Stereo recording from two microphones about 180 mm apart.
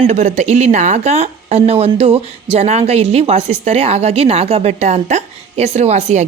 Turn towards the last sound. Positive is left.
turn(degrees=-40)  # may be behind; listen again after turning